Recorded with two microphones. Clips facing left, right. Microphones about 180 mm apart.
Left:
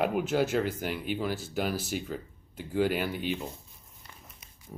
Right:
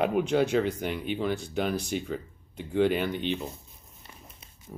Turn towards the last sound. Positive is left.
turn(degrees=-30)  # may be behind; listen again after turning